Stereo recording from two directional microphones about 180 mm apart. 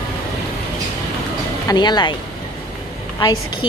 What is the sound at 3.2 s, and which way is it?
Speech, 20° left (ahead or behind).